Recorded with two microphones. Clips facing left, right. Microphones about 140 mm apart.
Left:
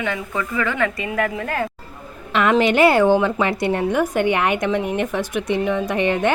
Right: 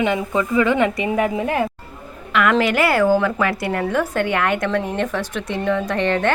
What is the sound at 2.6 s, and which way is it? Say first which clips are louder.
A woman's voice: left 2 dB; 20° left (ahead or behind).